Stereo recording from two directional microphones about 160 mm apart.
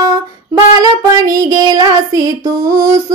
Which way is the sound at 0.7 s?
25° right (ahead or behind).